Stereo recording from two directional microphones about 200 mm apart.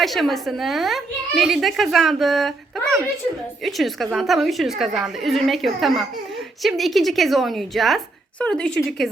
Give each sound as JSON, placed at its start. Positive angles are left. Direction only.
{"t": 0.0, "sound": "a woman's voice", "side_deg": 0}
{"t": 3.6, "sound": "a woman's voice", "side_deg": 0}